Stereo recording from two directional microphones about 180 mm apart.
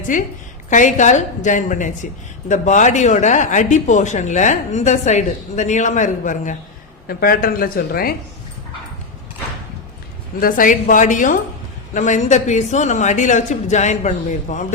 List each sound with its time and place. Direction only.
0.1 s a woman's voice: 45° left (ahead or behind)
7.1 s speech: 55° left (ahead or behind)
10.4 s a woman's voice: 50° left (ahead or behind)